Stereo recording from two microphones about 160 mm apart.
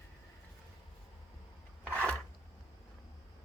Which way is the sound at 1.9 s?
10° left (ahead or behind).